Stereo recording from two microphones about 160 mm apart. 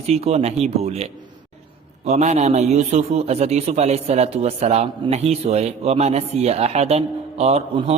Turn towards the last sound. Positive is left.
turn(degrees=-40)  # may be behind; listen again after turning